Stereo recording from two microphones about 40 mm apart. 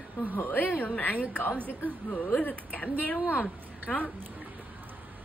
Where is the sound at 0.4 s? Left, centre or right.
Left.